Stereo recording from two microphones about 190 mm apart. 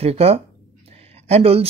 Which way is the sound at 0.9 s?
35° right (ahead or behind).